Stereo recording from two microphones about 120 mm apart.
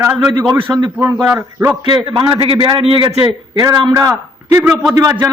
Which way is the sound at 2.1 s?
45° right (ahead or behind).